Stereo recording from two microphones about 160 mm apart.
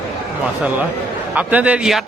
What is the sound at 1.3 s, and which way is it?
Speech, 10° right (ahead or behind).